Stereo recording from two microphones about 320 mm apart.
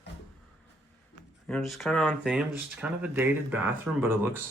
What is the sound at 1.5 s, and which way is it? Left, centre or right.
Speech, centre.